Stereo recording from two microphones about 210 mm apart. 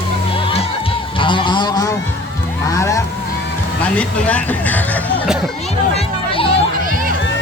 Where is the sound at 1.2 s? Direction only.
20° left (ahead or behind).